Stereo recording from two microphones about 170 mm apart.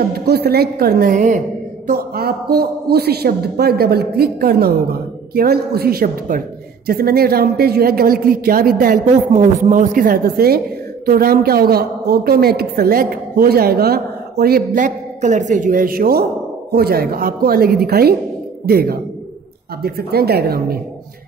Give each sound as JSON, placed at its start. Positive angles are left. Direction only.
{"t": 0.1, "sound": "a woman's voice", "side_deg": -65}
{"t": 1.9, "sound": "a woman's voice", "side_deg": -65}